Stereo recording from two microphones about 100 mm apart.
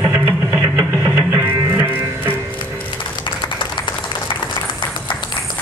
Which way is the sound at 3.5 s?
55° left (ahead or behind).